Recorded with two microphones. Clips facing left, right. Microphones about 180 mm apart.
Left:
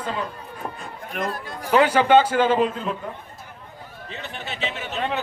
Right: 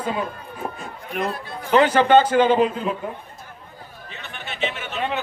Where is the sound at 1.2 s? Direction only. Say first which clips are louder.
Even; 45° left (ahead or behind).